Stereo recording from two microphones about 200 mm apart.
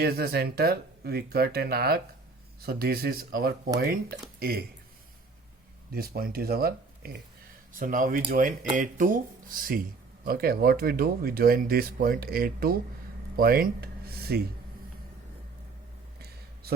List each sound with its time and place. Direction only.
0.0 s speech: 50° right (ahead or behind)
5.9 s speech: 50° right (ahead or behind)
16.1 s a sound: 50° right (ahead or behind)